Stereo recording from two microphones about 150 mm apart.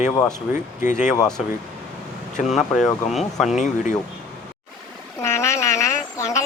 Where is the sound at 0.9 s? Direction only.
55° left (ahead or behind).